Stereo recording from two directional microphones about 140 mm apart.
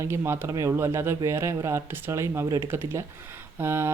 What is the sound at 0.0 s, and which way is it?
Speech, 20° right (ahead or behind).